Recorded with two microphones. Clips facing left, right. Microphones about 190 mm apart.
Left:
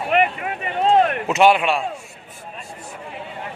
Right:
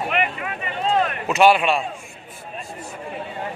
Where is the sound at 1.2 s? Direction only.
20° left (ahead or behind).